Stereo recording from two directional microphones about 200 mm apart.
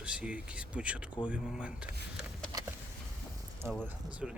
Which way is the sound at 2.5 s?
15° right (ahead or behind).